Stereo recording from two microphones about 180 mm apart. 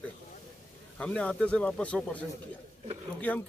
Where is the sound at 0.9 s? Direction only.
5° left (ahead or behind).